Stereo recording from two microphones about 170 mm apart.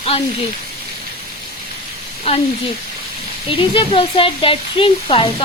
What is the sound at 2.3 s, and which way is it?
Speech, 35° left (ahead or behind).